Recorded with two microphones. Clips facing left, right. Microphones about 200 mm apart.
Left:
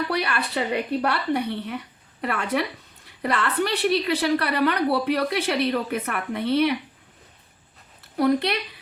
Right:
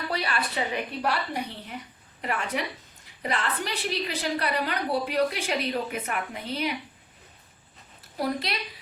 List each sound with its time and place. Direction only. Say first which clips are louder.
0.1 s a woman's voice: left 4 dB; 65° left (ahead or behind)
8.1 s speech: left 8 dB; 65° left (ahead or behind)